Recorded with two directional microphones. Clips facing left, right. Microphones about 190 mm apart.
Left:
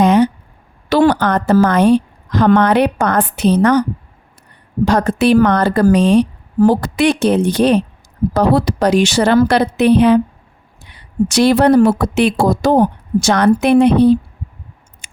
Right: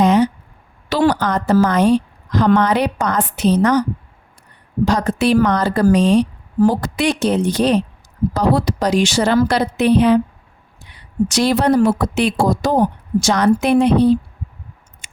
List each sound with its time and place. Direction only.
0.0 s a sound: 60° left (ahead or behind)
0.9 s a woman's voice: 60° left (ahead or behind)
4.9 s a woman's voice: 60° left (ahead or behind)
11.3 s a woman's voice: 65° left (ahead or behind)
15.0 s scissors: 70° left (ahead or behind)